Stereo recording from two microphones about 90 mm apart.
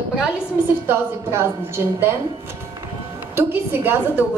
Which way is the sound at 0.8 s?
30° right (ahead or behind).